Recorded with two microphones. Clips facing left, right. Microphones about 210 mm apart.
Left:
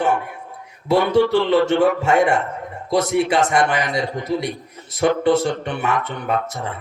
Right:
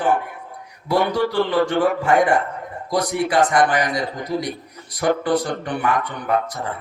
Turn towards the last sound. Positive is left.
turn(degrees=25)  # may be behind; listen again after turning